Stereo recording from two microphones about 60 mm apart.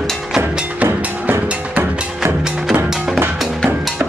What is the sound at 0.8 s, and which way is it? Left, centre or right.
Music, right.